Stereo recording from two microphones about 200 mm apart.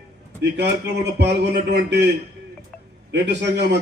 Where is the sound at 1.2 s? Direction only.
60° right (ahead or behind).